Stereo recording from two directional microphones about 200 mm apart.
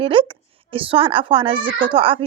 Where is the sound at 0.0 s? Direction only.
25° right (ahead or behind).